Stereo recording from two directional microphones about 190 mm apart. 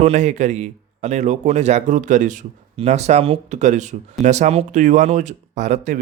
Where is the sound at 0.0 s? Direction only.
35° right (ahead or behind).